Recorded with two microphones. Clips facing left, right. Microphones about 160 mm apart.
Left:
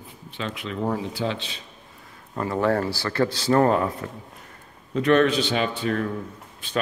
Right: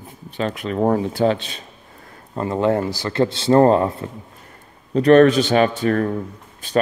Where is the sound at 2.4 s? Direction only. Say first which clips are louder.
Right 4 dB; 20° right (ahead or behind); by 6.1 s 45° right (ahead or behind).